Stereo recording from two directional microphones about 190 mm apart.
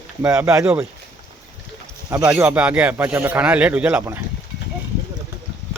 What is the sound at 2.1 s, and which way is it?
Speech, 10° right (ahead or behind).